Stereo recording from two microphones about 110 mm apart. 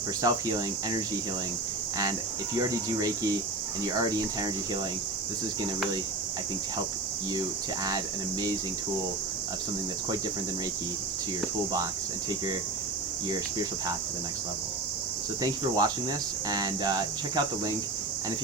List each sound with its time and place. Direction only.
0.2 s speech: 35° right (ahead or behind)
2.6 s speech: 35° right (ahead or behind)
7.9 s speech: 35° right (ahead or behind)
13.3 s speech: 40° right (ahead or behind)
15.4 s speech: 35° right (ahead or behind)